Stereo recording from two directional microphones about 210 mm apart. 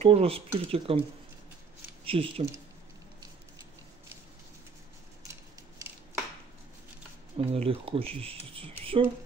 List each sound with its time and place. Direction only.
0.0 s speech: 30° right (ahead or behind)
2.0 s speech: 25° right (ahead or behind)
5.3 s a sound: 15° right (ahead or behind)
7.3 s speech: 30° right (ahead or behind)